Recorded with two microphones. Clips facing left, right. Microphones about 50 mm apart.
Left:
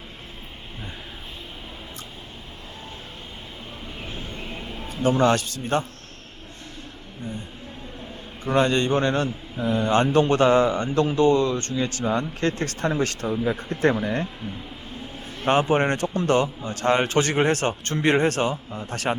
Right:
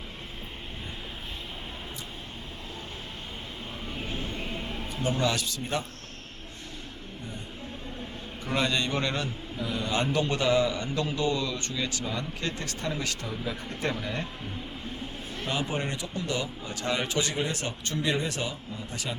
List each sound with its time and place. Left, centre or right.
5.0 s a man's voice: left
8.5 s a man's voice: left
15.4 s a man's voice: left